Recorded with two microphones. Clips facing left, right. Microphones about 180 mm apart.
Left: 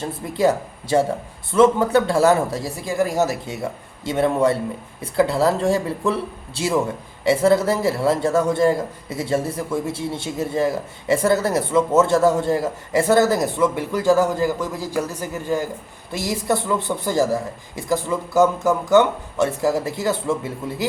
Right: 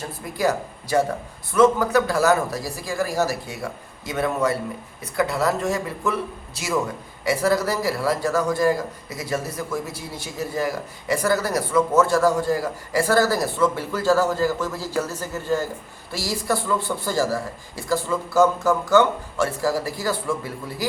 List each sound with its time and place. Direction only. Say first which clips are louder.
0.0 s a man's voice: left 4 dB; 25° left (ahead or behind)